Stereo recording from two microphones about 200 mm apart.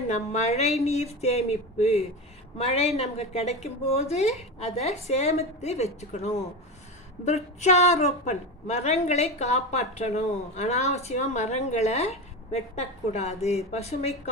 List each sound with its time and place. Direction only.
0.1 s a woman's voice: 35° left (ahead or behind)